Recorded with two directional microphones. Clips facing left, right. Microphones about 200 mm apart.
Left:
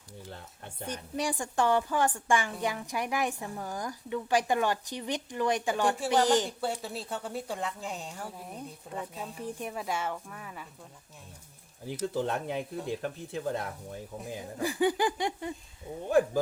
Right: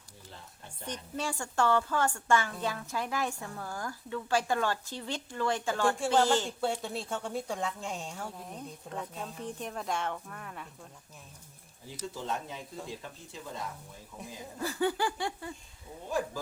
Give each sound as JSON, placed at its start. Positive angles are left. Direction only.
{"t": 0.3, "sound": "speech", "side_deg": 60}
{"t": 1.1, "sound": "a woman's voice", "side_deg": 15}
{"t": 6.6, "sound": "a woman's voice", "side_deg": 5}
{"t": 11.9, "sound": "speech", "side_deg": 60}
{"t": 14.6, "sound": "a woman's voice", "side_deg": 15}
{"t": 16.0, "sound": "speech", "side_deg": 60}